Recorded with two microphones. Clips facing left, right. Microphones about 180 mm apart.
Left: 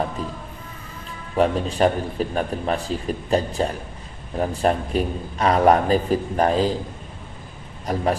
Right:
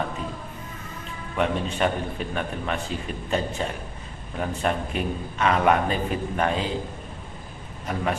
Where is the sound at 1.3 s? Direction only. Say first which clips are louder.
Left 5 dB; 35° left (ahead or behind).